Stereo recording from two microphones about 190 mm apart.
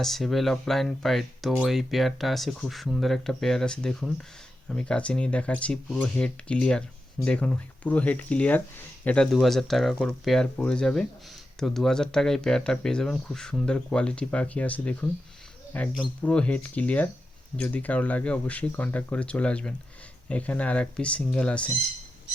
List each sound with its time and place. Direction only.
0.0 s speech: centre (ahead or behind)